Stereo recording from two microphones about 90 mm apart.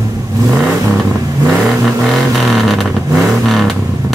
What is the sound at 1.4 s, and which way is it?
Vehicle, centre (ahead or behind).